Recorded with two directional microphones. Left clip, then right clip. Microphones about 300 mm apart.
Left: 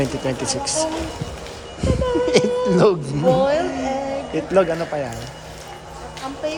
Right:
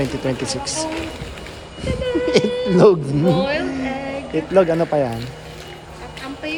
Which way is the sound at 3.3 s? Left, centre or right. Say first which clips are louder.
Left 2 dB; centre.